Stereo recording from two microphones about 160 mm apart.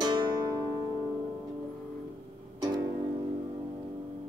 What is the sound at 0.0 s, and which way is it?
Music, 25° right (ahead or behind).